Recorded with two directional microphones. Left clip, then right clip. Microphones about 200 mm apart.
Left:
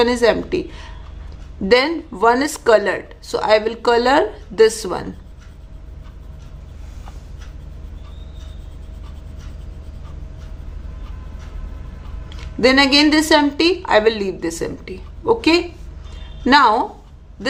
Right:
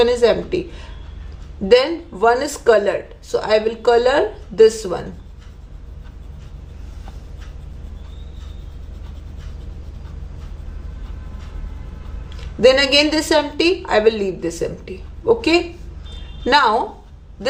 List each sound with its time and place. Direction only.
0.0 s a woman's voice: 20° left (ahead or behind)
12.5 s a woman's voice: 20° left (ahead or behind)